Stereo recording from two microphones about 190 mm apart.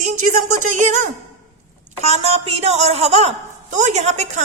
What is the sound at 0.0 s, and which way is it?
A woman's voice, 40° right (ahead or behind).